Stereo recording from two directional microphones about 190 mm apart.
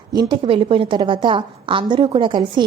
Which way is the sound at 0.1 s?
20° right (ahead or behind).